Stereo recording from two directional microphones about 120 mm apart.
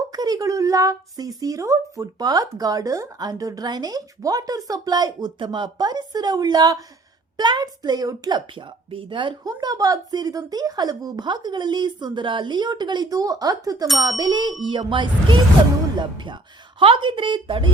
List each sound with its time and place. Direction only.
0.1 s speech: 30° right (ahead or behind)
8.5 s speech: 45° right (ahead or behind)